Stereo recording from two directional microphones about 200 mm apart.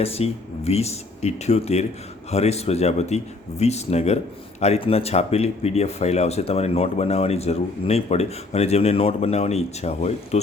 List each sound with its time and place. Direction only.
0.0 s speech: 30° left (ahead or behind)